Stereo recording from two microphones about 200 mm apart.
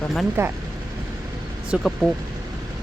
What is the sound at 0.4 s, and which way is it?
Speech, 15° right (ahead or behind).